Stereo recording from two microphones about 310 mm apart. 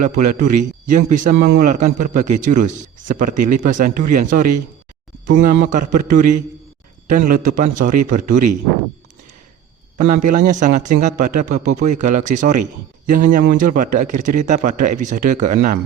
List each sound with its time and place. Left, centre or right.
0.4 s a man's voice: right
10.0 s a man's voice: right